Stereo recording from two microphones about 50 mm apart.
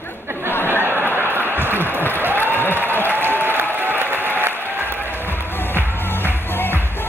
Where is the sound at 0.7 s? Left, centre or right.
Right.